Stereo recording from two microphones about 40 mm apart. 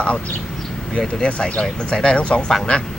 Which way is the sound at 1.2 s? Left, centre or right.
Left.